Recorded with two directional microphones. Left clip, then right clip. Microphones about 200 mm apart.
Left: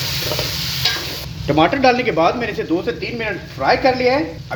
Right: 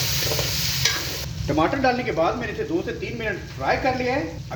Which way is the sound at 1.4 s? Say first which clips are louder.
Left 7 dB; 40° left (ahead or behind).